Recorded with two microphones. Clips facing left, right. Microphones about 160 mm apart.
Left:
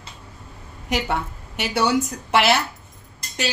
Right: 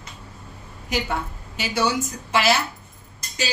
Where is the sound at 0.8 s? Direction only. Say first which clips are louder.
Left 2 dB; 70° left (ahead or behind).